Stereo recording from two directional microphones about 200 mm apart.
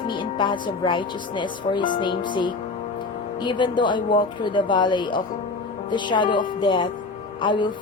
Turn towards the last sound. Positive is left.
turn(degrees=25)  # may be behind; listen again after turning